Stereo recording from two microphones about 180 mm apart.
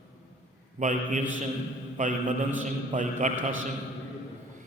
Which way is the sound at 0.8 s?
45° right (ahead or behind).